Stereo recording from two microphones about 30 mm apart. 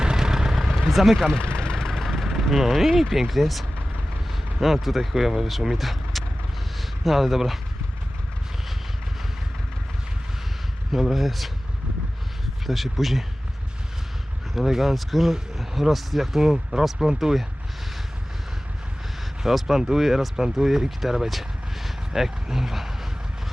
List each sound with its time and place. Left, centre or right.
0.0 s vehicle: right
0.7 s speech: centre
1.4 s vehicle: left
1.7 s vehicle: centre
2.0 s speech: centre
5.7 s vehicle: centre
6.7 s speech: centre
11.0 s speech: centre
12.6 s speech: centre
14.5 s speech: centre
16.4 s speech: centre
19.5 s speech: centre
21.2 s a sound: centre
22.1 s speech: centre